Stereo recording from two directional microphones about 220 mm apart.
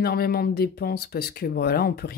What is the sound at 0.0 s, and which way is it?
Speech, 45° left (ahead or behind).